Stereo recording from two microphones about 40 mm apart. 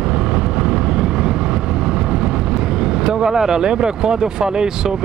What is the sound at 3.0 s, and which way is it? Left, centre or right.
Speech, centre.